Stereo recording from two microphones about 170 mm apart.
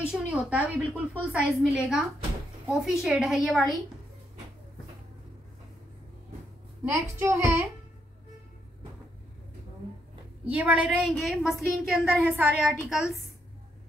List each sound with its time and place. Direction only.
0.0 s a woman's voice: 5° right (ahead or behind)
6.9 s a child's voice: 15° right (ahead or behind)
10.5 s a woman's voice: 10° right (ahead or behind)